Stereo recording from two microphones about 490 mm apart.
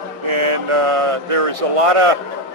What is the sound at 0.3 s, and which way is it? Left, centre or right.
Speech, right.